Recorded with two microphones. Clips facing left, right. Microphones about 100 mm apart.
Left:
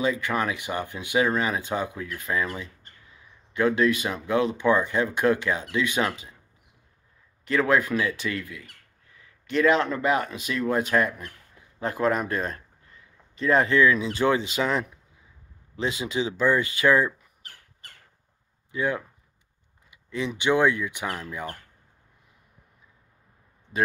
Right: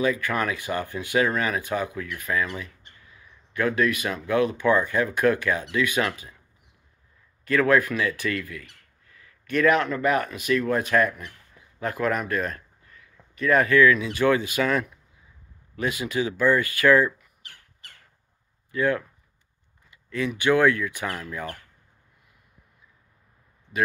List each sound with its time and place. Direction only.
0.0 s speech: 20° left (ahead or behind)
3.5 s speech: 25° left (ahead or behind)
7.4 s a man's voice: 20° left (ahead or behind)
17.4 s squawk: 40° left (ahead or behind)
18.7 s speech: 15° left (ahead or behind)